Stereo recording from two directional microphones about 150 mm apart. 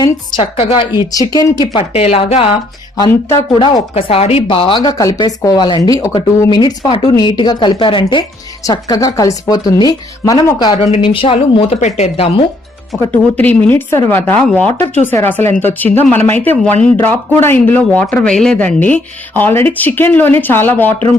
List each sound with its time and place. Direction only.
0.0 s a woman's voice: 30° left (ahead or behind)
1.9 s a woman's voice: 40° left (ahead or behind)
3.5 s speech: 35° left (ahead or behind)
8.6 s speech: 25° left (ahead or behind)
10.9 s a woman's voice: 35° left (ahead or behind)
11.8 s speech: 45° left (ahead or behind)
13.3 s a man's voice: 10° left (ahead or behind)